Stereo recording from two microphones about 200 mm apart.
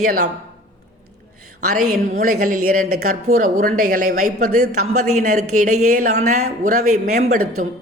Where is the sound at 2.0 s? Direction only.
45° right (ahead or behind).